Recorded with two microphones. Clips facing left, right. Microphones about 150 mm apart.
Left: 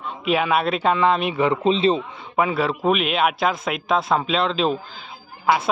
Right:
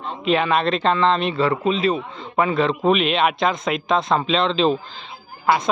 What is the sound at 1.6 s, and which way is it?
Speech, 30° left (ahead or behind).